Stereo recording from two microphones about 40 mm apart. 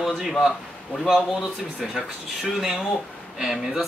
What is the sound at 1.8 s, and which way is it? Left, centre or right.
Speech, centre.